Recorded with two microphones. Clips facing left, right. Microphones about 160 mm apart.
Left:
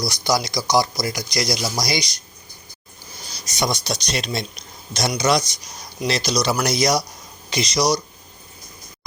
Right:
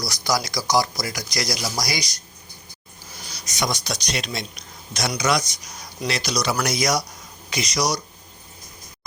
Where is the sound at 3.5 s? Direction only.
30° left (ahead or behind).